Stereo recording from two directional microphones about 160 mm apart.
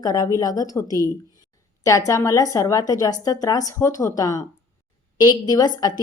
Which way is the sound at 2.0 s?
20° left (ahead or behind).